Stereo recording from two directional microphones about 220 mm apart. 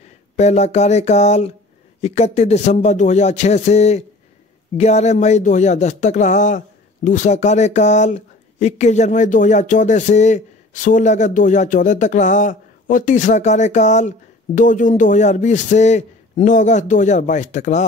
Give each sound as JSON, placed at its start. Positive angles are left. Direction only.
{"t": 0.0, "sound": "speech", "side_deg": 30}